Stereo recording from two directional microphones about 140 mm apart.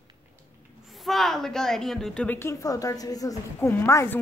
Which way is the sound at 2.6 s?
25° left (ahead or behind).